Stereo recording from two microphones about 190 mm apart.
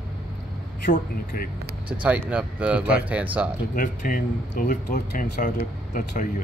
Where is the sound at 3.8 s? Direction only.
45° left (ahead or behind).